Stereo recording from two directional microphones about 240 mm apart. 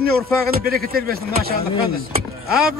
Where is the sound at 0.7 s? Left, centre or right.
Right.